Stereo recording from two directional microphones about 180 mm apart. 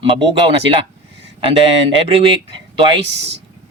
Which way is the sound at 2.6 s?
25° right (ahead or behind).